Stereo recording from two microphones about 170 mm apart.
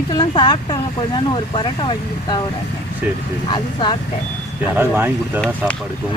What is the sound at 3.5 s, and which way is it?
Speech, 30° left (ahead or behind).